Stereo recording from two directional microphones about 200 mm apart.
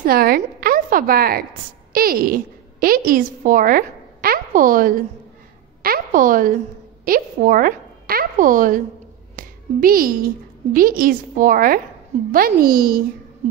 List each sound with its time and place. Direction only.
0.0 s a woman's voice: 50° right (ahead or behind)